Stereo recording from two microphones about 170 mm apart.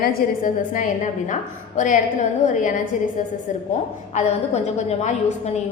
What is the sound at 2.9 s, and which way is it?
A woman's voice, 50° left (ahead or behind).